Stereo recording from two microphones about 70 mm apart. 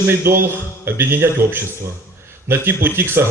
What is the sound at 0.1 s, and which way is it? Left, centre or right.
A man's voice, right.